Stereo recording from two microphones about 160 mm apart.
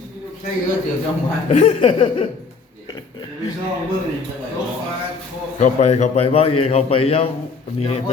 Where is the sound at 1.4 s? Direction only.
45° left (ahead or behind).